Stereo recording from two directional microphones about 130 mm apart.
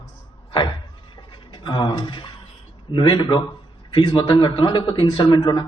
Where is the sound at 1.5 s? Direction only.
35° left (ahead or behind).